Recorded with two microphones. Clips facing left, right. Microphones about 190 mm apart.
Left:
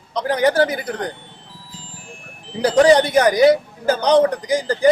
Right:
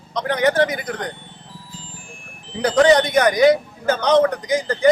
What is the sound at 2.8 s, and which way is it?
A man's voice, 30° left (ahead or behind).